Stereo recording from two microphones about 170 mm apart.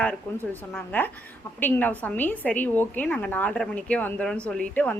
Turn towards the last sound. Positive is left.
turn(degrees=10)  # may be behind; listen again after turning